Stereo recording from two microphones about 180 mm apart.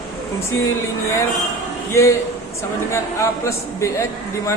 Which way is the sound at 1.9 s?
15° left (ahead or behind).